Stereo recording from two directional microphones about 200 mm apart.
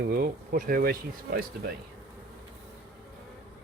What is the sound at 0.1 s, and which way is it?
Speech, 45° right (ahead or behind).